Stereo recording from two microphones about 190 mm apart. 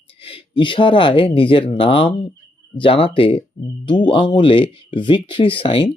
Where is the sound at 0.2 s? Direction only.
30° left (ahead or behind).